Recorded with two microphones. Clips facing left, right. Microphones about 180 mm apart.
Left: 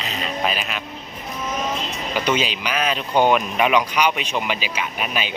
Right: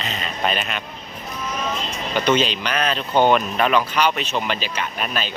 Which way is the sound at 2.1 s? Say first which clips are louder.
Right 3 dB; 10° left (ahead or behind).